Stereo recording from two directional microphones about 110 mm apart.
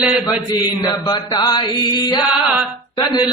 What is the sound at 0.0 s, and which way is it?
Mantra, 5° right (ahead or behind).